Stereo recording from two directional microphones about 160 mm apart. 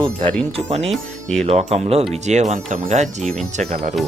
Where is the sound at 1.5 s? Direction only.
40° right (ahead or behind).